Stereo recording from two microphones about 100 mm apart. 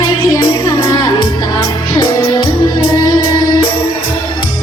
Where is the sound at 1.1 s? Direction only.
65° left (ahead or behind).